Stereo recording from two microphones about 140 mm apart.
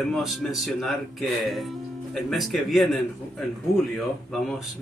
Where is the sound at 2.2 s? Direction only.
Centre (ahead or behind).